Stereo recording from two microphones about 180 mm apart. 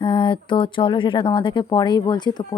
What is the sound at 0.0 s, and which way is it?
Speech, 25° left (ahead or behind).